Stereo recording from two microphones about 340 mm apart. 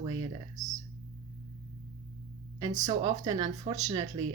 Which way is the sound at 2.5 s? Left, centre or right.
Centre.